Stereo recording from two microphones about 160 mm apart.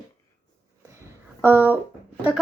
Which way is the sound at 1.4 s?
15° right (ahead or behind).